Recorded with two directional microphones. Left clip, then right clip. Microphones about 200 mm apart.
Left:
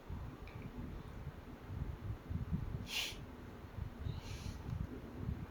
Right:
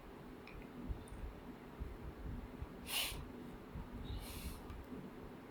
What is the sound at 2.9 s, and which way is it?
Snort, 15° right (ahead or behind).